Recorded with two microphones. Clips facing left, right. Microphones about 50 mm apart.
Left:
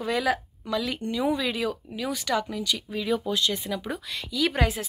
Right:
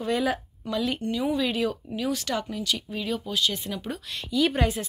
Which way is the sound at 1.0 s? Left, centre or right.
Left.